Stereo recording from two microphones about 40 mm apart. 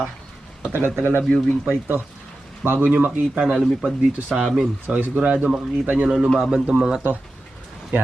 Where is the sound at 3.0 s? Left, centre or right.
Right.